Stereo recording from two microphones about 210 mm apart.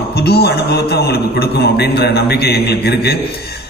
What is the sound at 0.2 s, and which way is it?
A man's voice, 50° left (ahead or behind).